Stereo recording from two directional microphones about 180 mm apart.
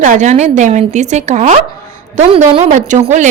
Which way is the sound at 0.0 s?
45° right (ahead or behind).